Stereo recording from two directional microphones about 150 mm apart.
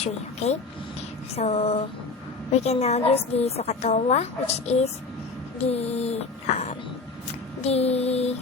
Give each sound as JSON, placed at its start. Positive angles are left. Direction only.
{"t": 0.0, "sound": "a woman's voice", "side_deg": 45}